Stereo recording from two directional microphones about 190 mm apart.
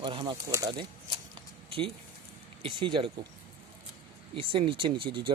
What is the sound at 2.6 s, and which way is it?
Speech, 25° right (ahead or behind).